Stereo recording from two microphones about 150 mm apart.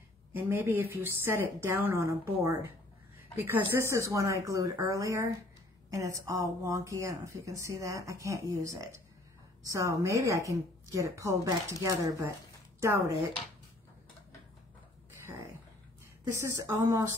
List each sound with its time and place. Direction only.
0.3 s a woman's voice: 15° right (ahead or behind)
16.6 s a woman's voice: 15° right (ahead or behind)